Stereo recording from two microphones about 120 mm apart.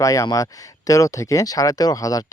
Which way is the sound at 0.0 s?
30° left (ahead or behind).